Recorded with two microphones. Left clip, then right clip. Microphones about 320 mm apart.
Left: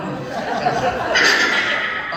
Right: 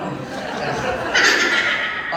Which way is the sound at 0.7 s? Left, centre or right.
Right.